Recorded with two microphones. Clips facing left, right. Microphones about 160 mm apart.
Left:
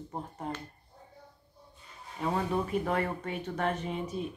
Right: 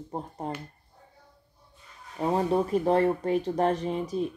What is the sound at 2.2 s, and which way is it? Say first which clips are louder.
Speech: right 6 dB; 35° right (ahead or behind).